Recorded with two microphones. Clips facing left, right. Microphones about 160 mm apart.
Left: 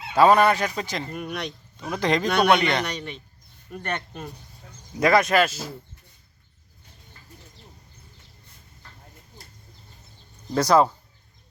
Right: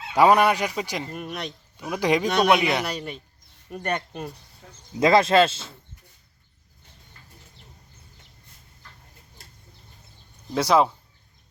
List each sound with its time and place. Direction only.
0.1 s speech: 15° right (ahead or behind)
1.1 s speech: centre (ahead or behind)
4.9 s speech: 25° right (ahead or behind)
10.5 s speech: centre (ahead or behind)